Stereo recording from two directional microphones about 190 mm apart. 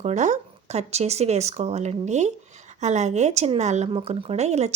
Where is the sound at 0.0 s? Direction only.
40° right (ahead or behind).